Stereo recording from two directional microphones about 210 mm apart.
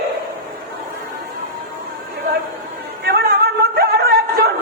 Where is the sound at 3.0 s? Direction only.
50° right (ahead or behind).